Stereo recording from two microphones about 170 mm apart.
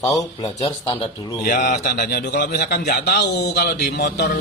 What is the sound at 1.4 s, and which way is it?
A man's voice, 55° left (ahead or behind).